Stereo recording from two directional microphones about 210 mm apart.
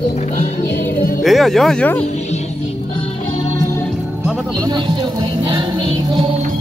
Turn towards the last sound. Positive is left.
turn(degrees=-20)  # may be behind; listen again after turning